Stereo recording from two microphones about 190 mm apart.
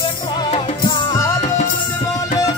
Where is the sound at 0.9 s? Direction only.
15° left (ahead or behind).